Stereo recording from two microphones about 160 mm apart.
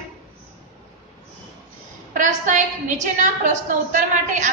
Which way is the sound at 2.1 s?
50° right (ahead or behind).